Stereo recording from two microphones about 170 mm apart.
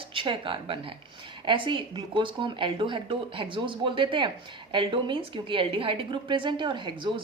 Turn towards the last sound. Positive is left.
turn(degrees=-30)  # may be behind; listen again after turning